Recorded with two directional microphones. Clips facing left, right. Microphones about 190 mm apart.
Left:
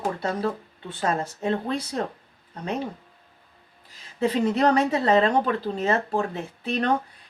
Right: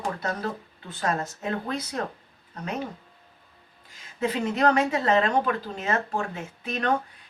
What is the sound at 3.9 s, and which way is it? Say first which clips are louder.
Speech: left 4 dB; 35° left (ahead or behind).